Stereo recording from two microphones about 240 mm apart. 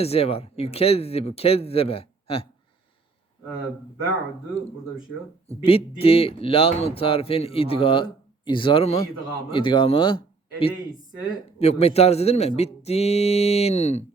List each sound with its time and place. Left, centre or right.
0.0 s speech: left
5.5 s a man's voice: left